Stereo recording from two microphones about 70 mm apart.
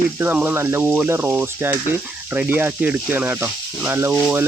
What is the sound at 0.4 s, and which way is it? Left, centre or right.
Speech, right.